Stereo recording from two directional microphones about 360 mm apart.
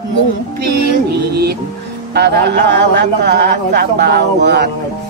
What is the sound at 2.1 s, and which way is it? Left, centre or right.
A man's voice, right.